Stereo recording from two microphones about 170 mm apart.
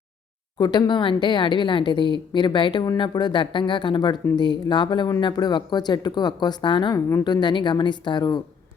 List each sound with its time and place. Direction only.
0.6 s a woman's voice: 25° left (ahead or behind)